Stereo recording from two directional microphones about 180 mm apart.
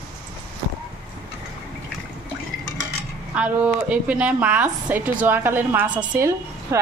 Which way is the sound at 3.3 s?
10° right (ahead or behind).